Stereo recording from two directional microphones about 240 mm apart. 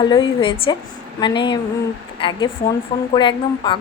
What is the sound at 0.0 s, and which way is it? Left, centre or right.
A woman's voice, centre.